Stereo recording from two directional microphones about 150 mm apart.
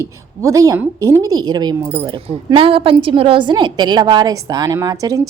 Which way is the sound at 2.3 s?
40° right (ahead or behind).